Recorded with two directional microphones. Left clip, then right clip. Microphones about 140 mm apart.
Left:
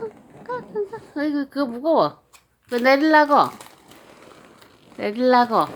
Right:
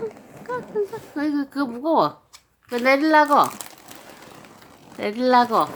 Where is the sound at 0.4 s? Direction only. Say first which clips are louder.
Right 1 dB; 15° left (ahead or behind).